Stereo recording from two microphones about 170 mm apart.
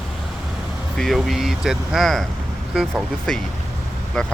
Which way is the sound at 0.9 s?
Centre (ahead or behind).